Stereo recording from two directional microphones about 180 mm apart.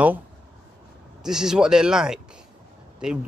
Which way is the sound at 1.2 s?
5° right (ahead or behind).